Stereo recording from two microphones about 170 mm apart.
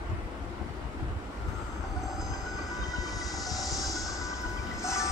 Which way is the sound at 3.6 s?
Centre (ahead or behind).